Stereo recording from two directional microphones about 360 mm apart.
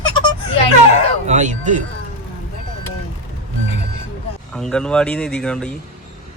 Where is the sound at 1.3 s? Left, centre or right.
Centre.